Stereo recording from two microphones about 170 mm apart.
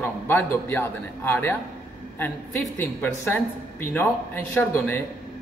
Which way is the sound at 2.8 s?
10° left (ahead or behind).